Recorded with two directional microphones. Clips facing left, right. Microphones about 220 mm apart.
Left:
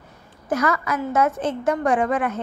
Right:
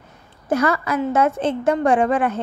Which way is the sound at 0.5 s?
30° right (ahead or behind).